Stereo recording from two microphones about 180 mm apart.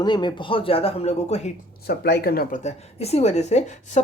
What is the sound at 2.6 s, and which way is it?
Speech, 35° left (ahead or behind).